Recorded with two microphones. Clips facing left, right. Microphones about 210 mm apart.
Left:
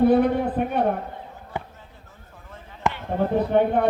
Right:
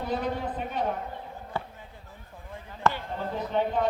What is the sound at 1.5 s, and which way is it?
Basketball bounce, 15° left (ahead or behind).